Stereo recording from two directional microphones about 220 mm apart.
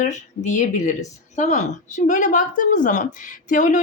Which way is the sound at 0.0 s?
35° left (ahead or behind).